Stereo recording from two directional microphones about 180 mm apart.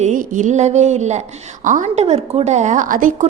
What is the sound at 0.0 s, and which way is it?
A woman's voice, 45° right (ahead or behind).